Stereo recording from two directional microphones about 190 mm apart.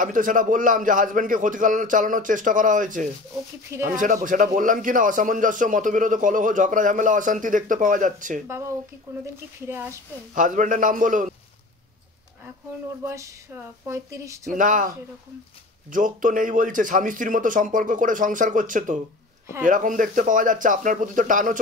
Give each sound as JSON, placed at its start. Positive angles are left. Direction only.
{"t": 0.0, "sound": "speech", "side_deg": -45}
{"t": 8.5, "sound": "speech", "side_deg": -15}
{"t": 10.3, "sound": "speech", "side_deg": -40}
{"t": 13.0, "sound": "speech", "side_deg": -15}
{"t": 14.5, "sound": "speech", "side_deg": -45}
{"t": 15.9, "sound": "speech", "side_deg": -45}